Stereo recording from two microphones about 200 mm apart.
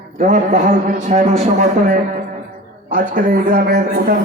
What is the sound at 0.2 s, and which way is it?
A man's voice, 40° right (ahead or behind).